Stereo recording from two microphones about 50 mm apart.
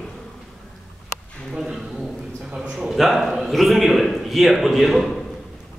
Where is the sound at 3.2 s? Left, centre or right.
Centre.